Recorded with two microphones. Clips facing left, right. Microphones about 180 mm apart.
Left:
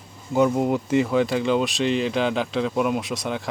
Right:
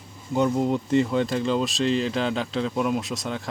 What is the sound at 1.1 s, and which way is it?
Speech, 70° left (ahead or behind).